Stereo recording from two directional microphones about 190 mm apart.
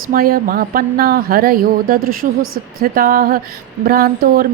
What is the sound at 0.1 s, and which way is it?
A woman's voice, 50° right (ahead or behind).